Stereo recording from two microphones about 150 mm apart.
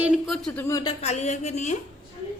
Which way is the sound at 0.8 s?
45° left (ahead or behind).